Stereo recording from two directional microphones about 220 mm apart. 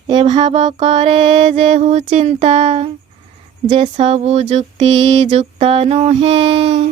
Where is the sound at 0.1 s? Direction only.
20° right (ahead or behind).